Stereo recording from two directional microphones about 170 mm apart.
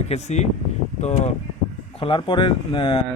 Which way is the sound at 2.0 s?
30° left (ahead or behind).